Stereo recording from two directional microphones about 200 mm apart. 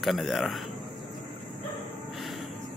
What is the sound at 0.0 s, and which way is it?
Speech, centre (ahead or behind).